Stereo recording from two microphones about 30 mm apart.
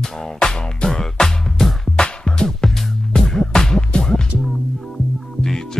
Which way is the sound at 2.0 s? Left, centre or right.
Left.